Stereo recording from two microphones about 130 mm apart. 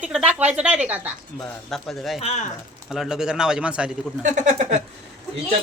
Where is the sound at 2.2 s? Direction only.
55° left (ahead or behind).